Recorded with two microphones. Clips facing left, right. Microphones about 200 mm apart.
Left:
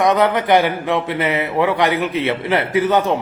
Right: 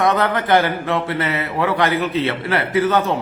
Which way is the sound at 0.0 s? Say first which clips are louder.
Left 3 dB; 15° left (ahead or behind).